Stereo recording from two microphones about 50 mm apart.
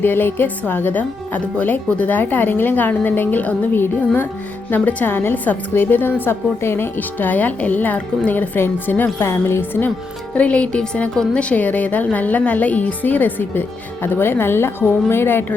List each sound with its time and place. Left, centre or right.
0.0 s a woman's voice: left
10.3 s a woman's voice: left